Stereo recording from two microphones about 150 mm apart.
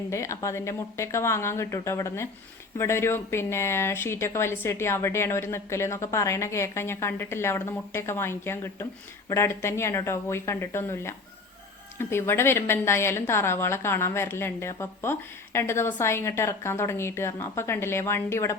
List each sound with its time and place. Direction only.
0.1 s a woman's voice: 20° left (ahead or behind)